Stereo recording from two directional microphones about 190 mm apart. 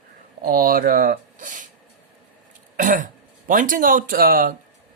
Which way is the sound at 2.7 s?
45° right (ahead or behind).